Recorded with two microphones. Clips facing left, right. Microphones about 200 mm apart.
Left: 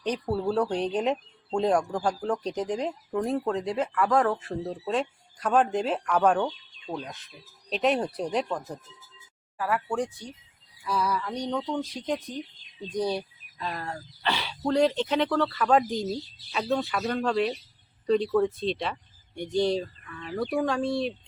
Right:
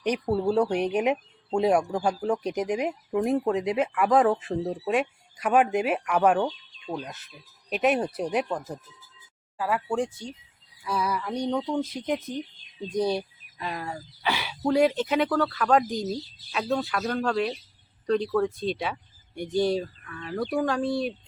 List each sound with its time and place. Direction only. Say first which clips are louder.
0.0 s speech: right 3 dB; 15° right (ahead or behind)
10.8 s speech: even; 10° right (ahead or behind)